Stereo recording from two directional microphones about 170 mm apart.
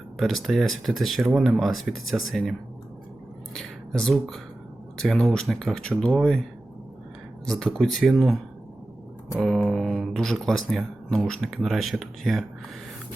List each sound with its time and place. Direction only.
0.2 s speech: centre (ahead or behind)
7.4 s speech: centre (ahead or behind)
9.6 s speech: centre (ahead or behind)